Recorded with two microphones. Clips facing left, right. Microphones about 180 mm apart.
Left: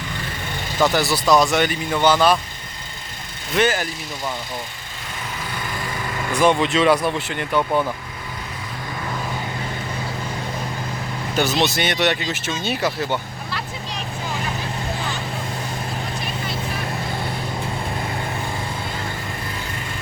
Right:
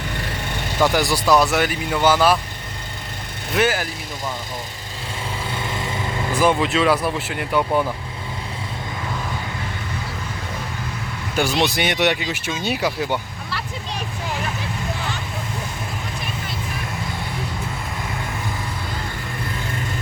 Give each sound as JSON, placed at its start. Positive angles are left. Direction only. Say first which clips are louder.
{"t": 0.8, "sound": "speech", "louder": "even", "side_deg": -10}
{"t": 3.5, "sound": "speech", "louder": "even", "side_deg": -5}
{"t": 5.5, "sound": "vehicle", "louder": "right 2 dB", "side_deg": -25}
{"t": 6.4, "sound": "speech", "louder": "left 1 dB", "side_deg": -5}
{"t": 11.6, "sound": "speech", "louder": "right 1 dB", "side_deg": -15}